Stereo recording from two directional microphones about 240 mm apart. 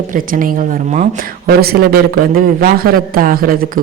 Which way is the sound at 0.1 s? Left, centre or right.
Right.